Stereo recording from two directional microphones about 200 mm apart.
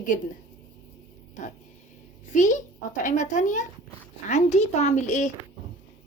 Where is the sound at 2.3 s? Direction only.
40° left (ahead or behind).